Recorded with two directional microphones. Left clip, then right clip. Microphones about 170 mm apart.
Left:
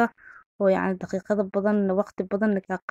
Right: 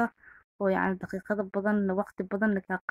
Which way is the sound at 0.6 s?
40° left (ahead or behind).